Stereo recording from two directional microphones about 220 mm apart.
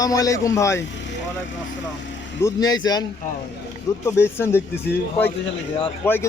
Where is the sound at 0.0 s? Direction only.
15° left (ahead or behind).